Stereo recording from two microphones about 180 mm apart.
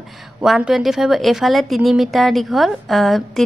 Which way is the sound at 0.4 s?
5° right (ahead or behind).